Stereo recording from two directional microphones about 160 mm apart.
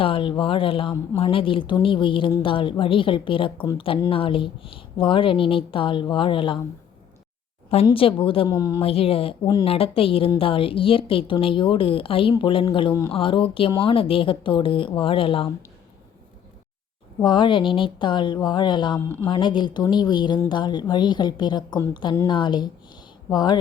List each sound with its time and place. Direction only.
0.0 s speech: 35° left (ahead or behind)
7.9 s speech: 35° left (ahead or behind)
8.5 s speech: 20° left (ahead or behind)
8.8 s speech: 35° left (ahead or behind)
12.9 s speech: 20° left (ahead or behind)
13.1 s speech: 35° left (ahead or behind)
17.2 s speech: 30° left (ahead or behind)